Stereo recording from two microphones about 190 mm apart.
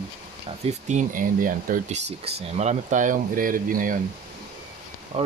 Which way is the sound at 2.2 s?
30° right (ahead or behind).